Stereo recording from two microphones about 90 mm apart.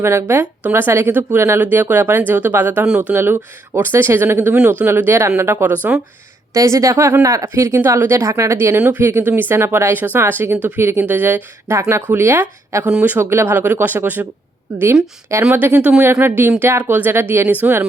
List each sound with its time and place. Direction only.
0.0 s speech: 30° right (ahead or behind)
1.6 s speech: 20° right (ahead or behind)
6.5 s speech: 35° right (ahead or behind)
11.8 s speech: 35° right (ahead or behind)
12.9 s speech: 15° right (ahead or behind)
13.1 s speech: 25° right (ahead or behind)
15.4 s speech: 20° right (ahead or behind)